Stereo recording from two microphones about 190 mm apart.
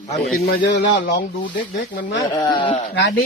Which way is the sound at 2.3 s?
20° left (ahead or behind).